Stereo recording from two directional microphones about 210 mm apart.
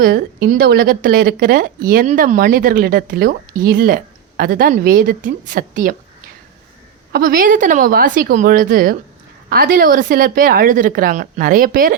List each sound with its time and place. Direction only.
0.0 s speech: 50° right (ahead or behind)
7.1 s speech: 45° right (ahead or behind)